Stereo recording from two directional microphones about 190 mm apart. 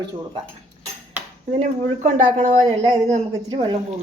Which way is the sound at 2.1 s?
40° right (ahead or behind).